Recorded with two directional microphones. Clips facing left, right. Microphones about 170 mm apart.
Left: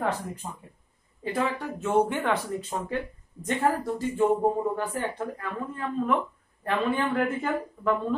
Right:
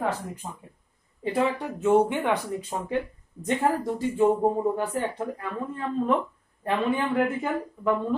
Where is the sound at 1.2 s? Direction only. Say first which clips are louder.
Right 3 dB; 15° right (ahead or behind).